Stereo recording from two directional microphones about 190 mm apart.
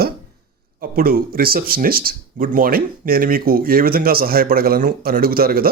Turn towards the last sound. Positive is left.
turn(degrees=-50)  # may be behind; listen again after turning